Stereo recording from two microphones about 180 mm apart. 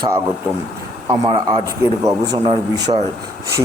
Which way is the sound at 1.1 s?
20° right (ahead or behind).